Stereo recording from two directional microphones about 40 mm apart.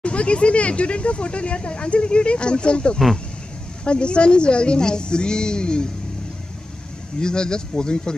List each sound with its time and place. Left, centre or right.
0.0 s a sound: left
3.8 s a woman's voice: left
7.2 s a woman's voice: centre